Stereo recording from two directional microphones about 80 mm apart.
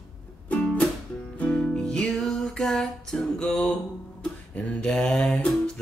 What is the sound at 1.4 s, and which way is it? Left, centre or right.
Music, centre.